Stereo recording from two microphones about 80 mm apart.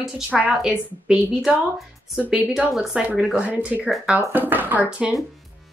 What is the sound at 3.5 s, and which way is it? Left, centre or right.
Speech, centre.